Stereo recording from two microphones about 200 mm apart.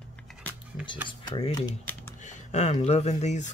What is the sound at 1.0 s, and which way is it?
Speech, 25° left (ahead or behind).